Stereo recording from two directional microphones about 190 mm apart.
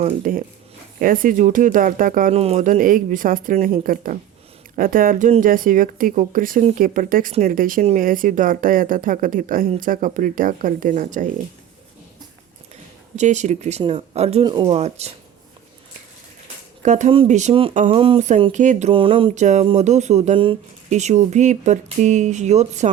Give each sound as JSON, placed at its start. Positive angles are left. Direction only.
{"t": 0.3, "sound": "speech", "side_deg": -45}
{"t": 2.3, "sound": "speech", "side_deg": -35}
{"t": 13.1, "sound": "speech", "side_deg": -40}
{"t": 16.8, "sound": "speech", "side_deg": -40}
{"t": 17.9, "sound": "a sound", "side_deg": -30}
{"t": 18.5, "sound": "speech", "side_deg": -40}